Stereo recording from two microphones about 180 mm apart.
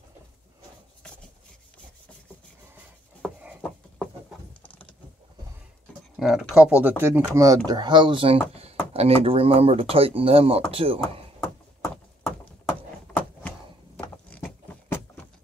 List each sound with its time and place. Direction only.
6.1 s speech: 5° right (ahead or behind); by 11.2 s 30° right (ahead or behind)
12.2 s a sound: 5° left (ahead or behind)
13.9 s vehicle: 5° left (ahead or behind)